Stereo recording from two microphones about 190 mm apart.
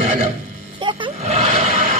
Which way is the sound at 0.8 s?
25° right (ahead or behind).